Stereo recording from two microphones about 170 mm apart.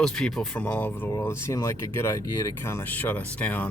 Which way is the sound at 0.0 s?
5° left (ahead or behind).